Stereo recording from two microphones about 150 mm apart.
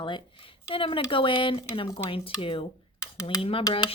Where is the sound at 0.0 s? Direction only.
35° left (ahead or behind).